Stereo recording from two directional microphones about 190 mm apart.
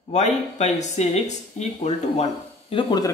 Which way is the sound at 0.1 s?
35° left (ahead or behind).